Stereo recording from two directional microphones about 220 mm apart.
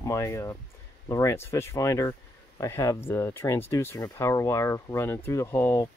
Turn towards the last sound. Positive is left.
turn(degrees=10)  # may be behind; listen again after turning